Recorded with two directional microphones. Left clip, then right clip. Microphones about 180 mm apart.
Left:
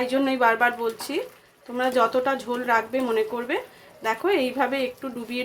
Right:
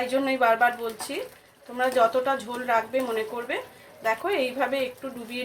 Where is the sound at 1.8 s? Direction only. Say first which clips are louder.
Even; 75° left (ahead or behind).